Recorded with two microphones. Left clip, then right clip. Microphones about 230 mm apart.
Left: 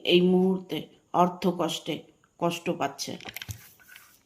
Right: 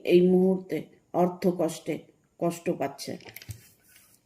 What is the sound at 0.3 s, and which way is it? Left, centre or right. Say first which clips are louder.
Speech: right 1 dB; left.